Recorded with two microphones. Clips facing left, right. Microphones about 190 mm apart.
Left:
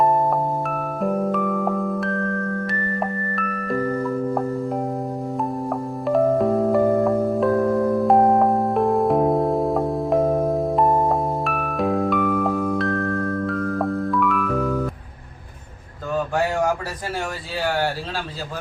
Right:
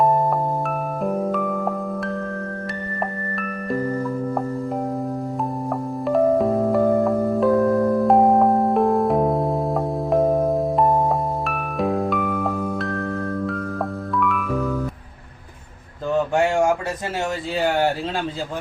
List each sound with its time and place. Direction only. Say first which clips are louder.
1.0 s music: left 1 dB; centre (ahead or behind)
6.1 s music: even; centre (ahead or behind)
16.1 s a sound: right 3 dB; 25° right (ahead or behind)